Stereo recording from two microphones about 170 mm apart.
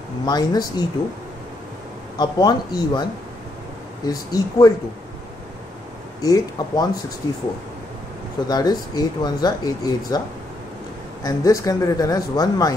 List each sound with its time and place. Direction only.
0.2 s speech: 25° left (ahead or behind)
2.1 s speech: 25° left (ahead or behind)
4.1 s speech: 20° left (ahead or behind)
6.2 s speech: 20° left (ahead or behind)
8.5 s speech: 25° left (ahead or behind)
11.2 s speech: 20° left (ahead or behind)